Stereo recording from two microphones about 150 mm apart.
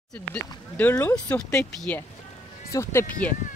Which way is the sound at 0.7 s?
15° left (ahead or behind).